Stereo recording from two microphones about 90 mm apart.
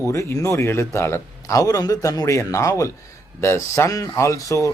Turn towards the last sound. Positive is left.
turn(degrees=40)  # may be behind; listen again after turning